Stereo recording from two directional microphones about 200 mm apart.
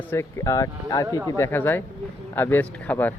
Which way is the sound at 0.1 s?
15° left (ahead or behind).